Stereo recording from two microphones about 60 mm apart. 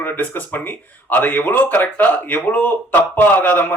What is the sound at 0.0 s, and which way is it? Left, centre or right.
Speech, left.